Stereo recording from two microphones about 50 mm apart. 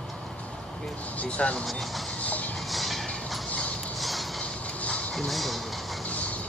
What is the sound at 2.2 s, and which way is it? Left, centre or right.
Train, left.